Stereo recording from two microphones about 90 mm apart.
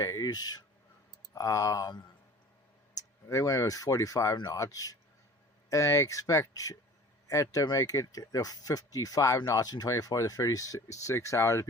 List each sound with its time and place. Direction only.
0.0 s speech: 45° left (ahead or behind)
1.3 s speech: 40° left (ahead or behind)